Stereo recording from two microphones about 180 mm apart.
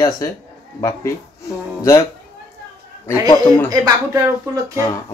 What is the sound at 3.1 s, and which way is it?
Speech, 15° left (ahead or behind).